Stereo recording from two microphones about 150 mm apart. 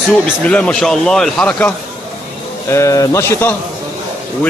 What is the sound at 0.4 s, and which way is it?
Speech, 10° left (ahead or behind).